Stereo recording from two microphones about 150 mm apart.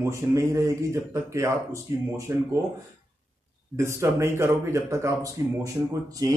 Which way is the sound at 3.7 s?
20° right (ahead or behind).